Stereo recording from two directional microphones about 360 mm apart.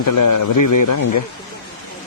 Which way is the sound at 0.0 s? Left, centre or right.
Left.